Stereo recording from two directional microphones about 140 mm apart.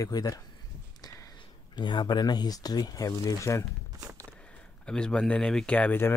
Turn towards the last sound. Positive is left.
turn(degrees=15)  # may be behind; listen again after turning